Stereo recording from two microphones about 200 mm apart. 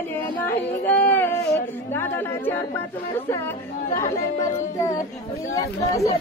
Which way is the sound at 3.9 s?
15° left (ahead or behind).